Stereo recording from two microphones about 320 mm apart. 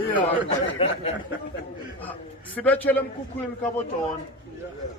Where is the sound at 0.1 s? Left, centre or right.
Centre.